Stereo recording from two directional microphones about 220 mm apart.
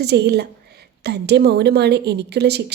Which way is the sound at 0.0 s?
50° right (ahead or behind).